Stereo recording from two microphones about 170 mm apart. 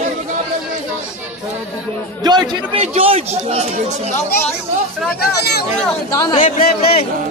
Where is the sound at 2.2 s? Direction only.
25° right (ahead or behind).